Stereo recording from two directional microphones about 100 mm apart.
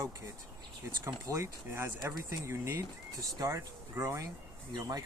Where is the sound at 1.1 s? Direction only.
30° right (ahead or behind).